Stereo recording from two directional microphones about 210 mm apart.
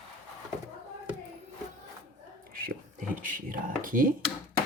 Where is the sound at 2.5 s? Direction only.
40° right (ahead or behind).